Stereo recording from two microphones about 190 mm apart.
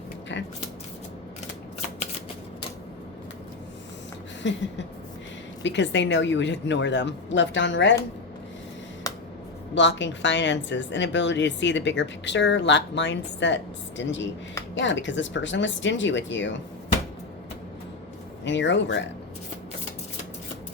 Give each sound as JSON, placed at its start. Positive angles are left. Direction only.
{"t": 0.3, "sound": "shuffling cards", "side_deg": 70}
{"t": 4.4, "sound": "speech", "side_deg": 70}
{"t": 5.6, "sound": "speech", "side_deg": 70}
{"t": 9.1, "sound": "a sound", "side_deg": 20}
{"t": 9.7, "sound": "speech", "side_deg": 70}
{"t": 18.4, "sound": "speech", "side_deg": 70}